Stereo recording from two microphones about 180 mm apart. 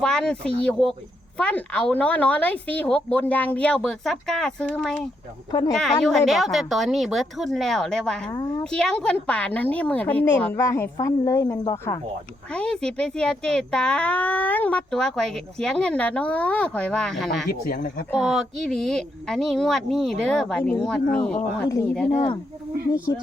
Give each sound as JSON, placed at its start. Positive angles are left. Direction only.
{"t": 0.0, "sound": "speech", "side_deg": 5}
{"t": 5.5, "sound": "a woman's voice", "side_deg": 20}
{"t": 5.7, "sound": "speech", "side_deg": 0}
{"t": 8.3, "sound": "a woman's voice", "side_deg": 20}
{"t": 8.7, "sound": "speech", "side_deg": 5}
{"t": 12.5, "sound": "speech", "side_deg": 5}